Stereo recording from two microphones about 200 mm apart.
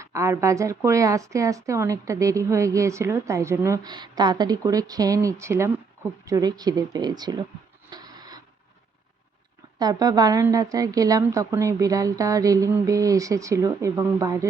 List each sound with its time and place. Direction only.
0.0 s a woman's voice: 15° right (ahead or behind)
7.9 s printer: 20° right (ahead or behind)
9.7 s a woman's voice: 20° right (ahead or behind)